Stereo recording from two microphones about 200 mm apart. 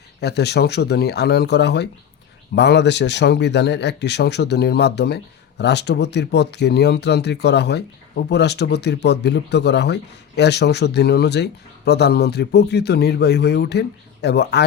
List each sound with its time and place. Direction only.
0.2 s speech: 55° left (ahead or behind)